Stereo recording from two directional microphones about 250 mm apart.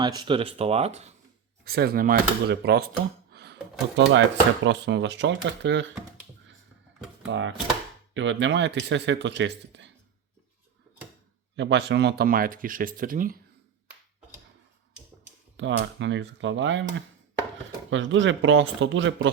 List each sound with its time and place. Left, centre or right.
0.0 s speech: centre
1.6 s speech: right
3.3 s a sound: right
4.6 s speech: right
7.3 s speech: right
11.5 s speech: right
15.5 s speech: right
17.9 s speech: right